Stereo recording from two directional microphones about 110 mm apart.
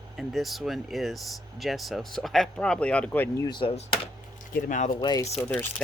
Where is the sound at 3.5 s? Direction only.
50° left (ahead or behind).